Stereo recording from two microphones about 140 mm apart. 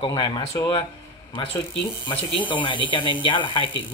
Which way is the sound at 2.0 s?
40° left (ahead or behind).